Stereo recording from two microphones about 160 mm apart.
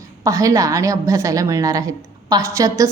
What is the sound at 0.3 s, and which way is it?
A woman's voice, 20° right (ahead or behind).